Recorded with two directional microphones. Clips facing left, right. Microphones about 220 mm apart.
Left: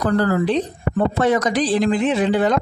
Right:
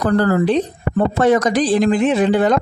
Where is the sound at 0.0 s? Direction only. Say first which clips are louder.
Right 3 dB; 50° right (ahead or behind).